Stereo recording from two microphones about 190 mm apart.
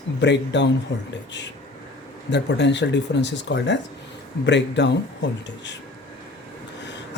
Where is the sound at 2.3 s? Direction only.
65° left (ahead or behind).